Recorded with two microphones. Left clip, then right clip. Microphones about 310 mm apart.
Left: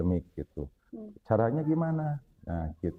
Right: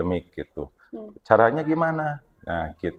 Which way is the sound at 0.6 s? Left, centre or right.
Centre.